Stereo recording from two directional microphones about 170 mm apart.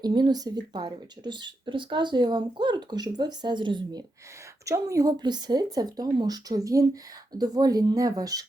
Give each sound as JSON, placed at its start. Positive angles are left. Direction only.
{"t": 0.0, "sound": "speech", "side_deg": -25}